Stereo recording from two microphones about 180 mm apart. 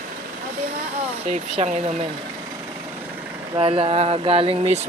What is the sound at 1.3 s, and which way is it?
Speech, 40° right (ahead or behind).